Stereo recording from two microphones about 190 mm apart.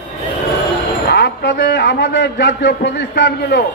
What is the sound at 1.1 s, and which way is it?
A man's voice, 65° left (ahead or behind).